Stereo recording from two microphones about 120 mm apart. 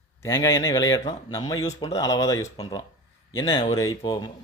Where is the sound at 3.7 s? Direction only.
25° left (ahead or behind).